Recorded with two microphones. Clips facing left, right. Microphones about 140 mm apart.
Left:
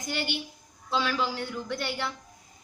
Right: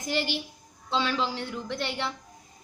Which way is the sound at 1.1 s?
30° right (ahead or behind).